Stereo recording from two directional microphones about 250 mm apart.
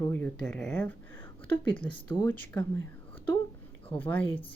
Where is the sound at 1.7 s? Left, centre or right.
Centre.